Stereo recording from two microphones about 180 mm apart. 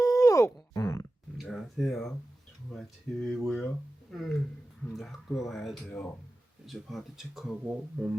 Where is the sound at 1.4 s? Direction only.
Centre (ahead or behind).